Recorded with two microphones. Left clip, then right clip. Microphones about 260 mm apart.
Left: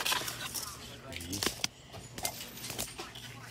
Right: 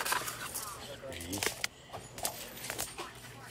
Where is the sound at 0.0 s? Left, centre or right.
Left.